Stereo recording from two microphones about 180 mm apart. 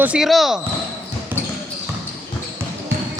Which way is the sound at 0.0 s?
5° right (ahead or behind).